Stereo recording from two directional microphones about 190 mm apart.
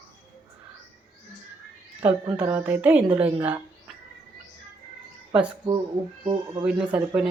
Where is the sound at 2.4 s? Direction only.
10° right (ahead or behind).